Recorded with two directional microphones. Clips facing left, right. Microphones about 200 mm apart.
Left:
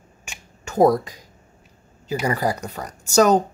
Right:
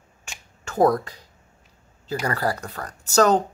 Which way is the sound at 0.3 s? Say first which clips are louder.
Left 1 dB; 15° left (ahead or behind).